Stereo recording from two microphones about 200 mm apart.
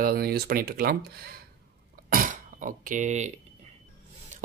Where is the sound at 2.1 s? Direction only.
40° right (ahead or behind).